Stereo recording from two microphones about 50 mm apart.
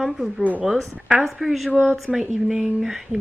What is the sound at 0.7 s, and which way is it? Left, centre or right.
Speech, centre.